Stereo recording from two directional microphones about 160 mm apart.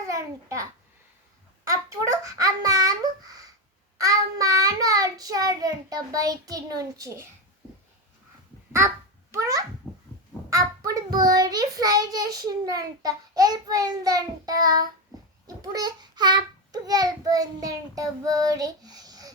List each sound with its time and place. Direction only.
0.1 s a child's voice: 20° right (ahead or behind)
1.6 s a sound: 20° right (ahead or behind)
4.0 s a child's voice: 20° right (ahead or behind)
9.3 s a child's voice: 20° right (ahead or behind)